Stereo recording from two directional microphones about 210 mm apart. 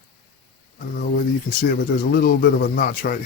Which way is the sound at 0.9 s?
45° left (ahead or behind).